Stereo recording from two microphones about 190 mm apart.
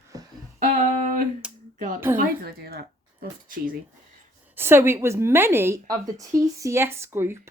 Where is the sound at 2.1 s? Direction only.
55° right (ahead or behind).